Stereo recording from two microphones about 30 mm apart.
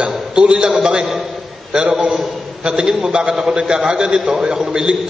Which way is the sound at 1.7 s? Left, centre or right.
Right.